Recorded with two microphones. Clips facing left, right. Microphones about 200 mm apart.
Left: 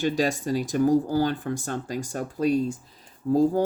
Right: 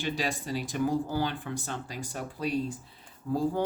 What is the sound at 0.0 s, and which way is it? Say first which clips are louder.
Speech: left 8 dB; 45° left (ahead or behind).